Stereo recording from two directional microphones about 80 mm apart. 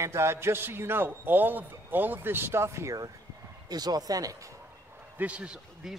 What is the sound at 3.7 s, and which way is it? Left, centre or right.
Speech, right.